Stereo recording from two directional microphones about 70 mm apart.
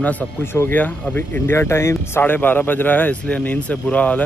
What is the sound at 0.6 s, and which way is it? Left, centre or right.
Speech, left.